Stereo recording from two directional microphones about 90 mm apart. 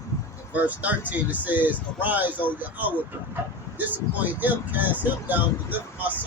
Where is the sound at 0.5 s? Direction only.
20° right (ahead or behind).